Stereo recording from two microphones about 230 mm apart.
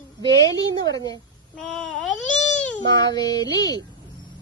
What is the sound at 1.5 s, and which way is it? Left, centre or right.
Speech, centre.